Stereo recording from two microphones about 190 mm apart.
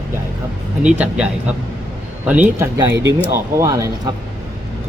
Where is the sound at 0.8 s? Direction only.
5° right (ahead or behind).